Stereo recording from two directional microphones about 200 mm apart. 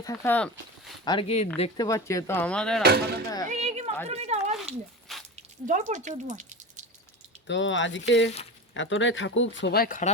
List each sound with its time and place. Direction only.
0.0 s speech: 15° left (ahead or behind)
1.0 s speech: 25° left (ahead or behind)
1.8 s speech: 15° left (ahead or behind)
2.8 s speech: 50° right (ahead or behind)
3.4 s a sound: 35° right (ahead or behind)
4.1 s speech: 30° right (ahead or behind)
7.4 s speech: 65° left (ahead or behind); by 10.1 s 45° left (ahead or behind)